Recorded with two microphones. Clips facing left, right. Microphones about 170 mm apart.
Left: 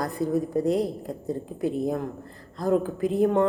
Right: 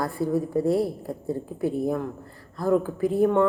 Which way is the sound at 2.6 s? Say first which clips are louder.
Right 1 dB; 20° left (ahead or behind).